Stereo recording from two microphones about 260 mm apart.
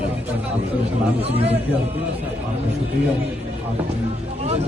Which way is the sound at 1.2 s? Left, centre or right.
Right.